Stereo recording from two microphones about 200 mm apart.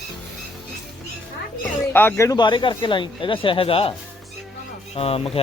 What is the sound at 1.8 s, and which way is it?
Speech, 10° left (ahead or behind).